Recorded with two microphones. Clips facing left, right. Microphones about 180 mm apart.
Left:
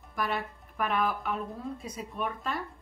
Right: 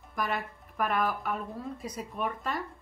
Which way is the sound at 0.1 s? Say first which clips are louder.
Even; centre (ahead or behind).